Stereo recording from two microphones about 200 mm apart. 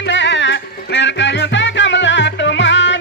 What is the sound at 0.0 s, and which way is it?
Music, 60° left (ahead or behind).